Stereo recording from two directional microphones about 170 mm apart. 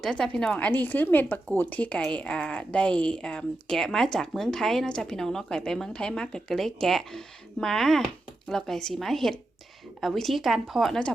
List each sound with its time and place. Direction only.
0.0 s a woman's voice: 5° left (ahead or behind)